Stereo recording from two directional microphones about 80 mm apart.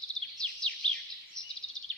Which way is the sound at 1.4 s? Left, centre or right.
Right.